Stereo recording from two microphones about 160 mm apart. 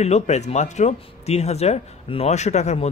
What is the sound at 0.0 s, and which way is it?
Speech, 45° left (ahead or behind).